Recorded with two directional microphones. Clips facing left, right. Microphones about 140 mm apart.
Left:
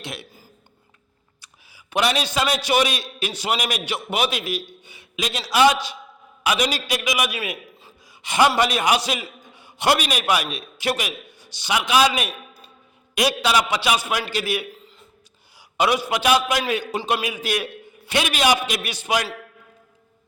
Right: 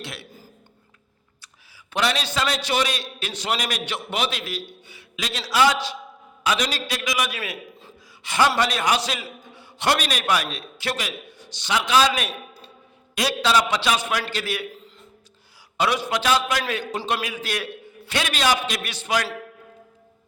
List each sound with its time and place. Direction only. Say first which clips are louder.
0.0 s a sound: left 2 dB; 20° left (ahead or behind)
1.4 s a man's voice: even; 15° left (ahead or behind)
15.8 s a man's voice: left 2 dB; 10° left (ahead or behind)